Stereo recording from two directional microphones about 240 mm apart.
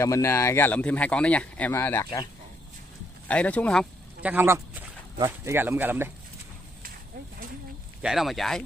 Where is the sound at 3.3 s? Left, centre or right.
Centre.